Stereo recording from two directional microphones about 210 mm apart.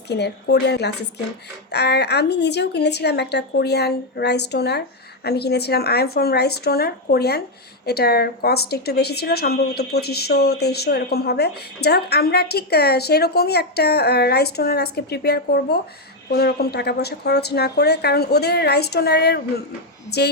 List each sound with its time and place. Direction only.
0.1 s a woman's voice: 55° left (ahead or behind)